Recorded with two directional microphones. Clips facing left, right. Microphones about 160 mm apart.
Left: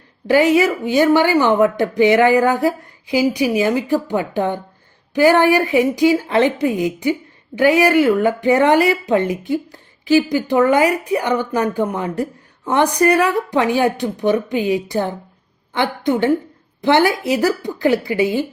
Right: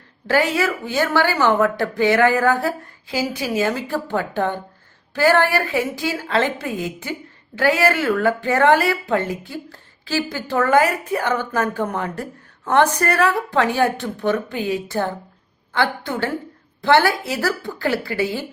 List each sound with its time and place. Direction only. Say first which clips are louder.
0.3 s speech: left 6 dB; 15° left (ahead or behind)